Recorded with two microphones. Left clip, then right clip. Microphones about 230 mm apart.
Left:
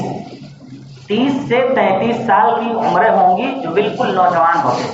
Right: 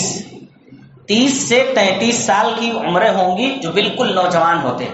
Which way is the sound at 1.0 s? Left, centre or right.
Right.